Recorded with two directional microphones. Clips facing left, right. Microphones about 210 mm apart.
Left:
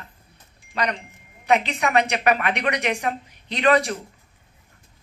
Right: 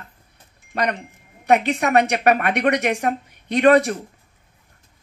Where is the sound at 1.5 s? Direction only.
50° right (ahead or behind).